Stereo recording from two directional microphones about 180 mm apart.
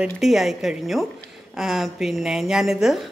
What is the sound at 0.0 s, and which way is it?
Speech, centre (ahead or behind).